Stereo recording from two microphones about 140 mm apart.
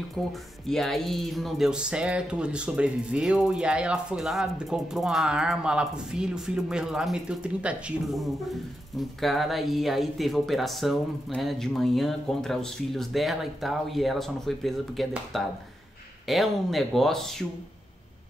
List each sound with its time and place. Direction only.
0.1 s speech: centre (ahead or behind)